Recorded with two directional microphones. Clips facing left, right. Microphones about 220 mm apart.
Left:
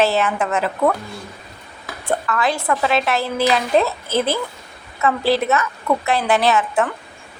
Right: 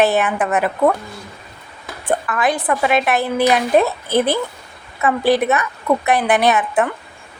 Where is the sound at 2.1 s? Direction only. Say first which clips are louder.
Right 2 dB; 15° right (ahead or behind).